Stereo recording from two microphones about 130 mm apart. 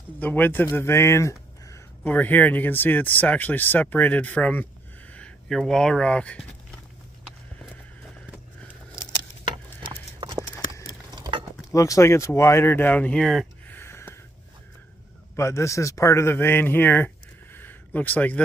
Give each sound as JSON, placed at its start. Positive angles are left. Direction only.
{"t": 0.2, "sound": "speech", "side_deg": 15}
{"t": 11.1, "sound": "a sound", "side_deg": -35}
{"t": 11.7, "sound": "speech", "side_deg": 25}
{"t": 13.2, "sound": "speech", "side_deg": 0}
{"t": 13.7, "sound": "a sound", "side_deg": 20}
{"t": 15.3, "sound": "a man's voice", "side_deg": 20}